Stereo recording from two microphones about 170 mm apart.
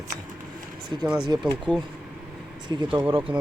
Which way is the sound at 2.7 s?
25° right (ahead or behind).